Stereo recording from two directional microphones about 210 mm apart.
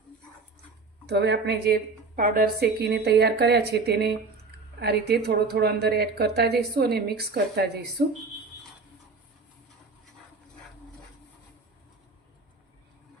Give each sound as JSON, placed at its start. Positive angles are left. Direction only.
{"t": 1.0, "sound": "a woman's voice", "side_deg": -55}